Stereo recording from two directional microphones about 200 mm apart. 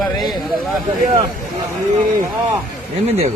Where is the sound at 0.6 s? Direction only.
Centre (ahead or behind).